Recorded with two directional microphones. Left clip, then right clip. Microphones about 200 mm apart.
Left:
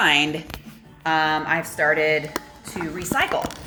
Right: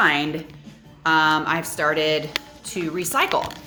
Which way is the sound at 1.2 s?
25° right (ahead or behind).